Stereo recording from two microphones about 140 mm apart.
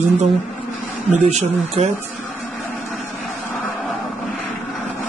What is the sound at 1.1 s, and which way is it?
Speech, 55° right (ahead or behind).